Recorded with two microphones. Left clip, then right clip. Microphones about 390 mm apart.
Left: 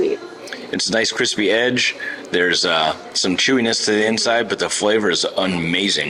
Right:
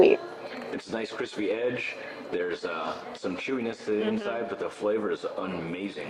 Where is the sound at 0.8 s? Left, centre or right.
Left.